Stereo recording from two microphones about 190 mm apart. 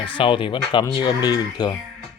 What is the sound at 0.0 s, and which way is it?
Speech, 25° left (ahead or behind).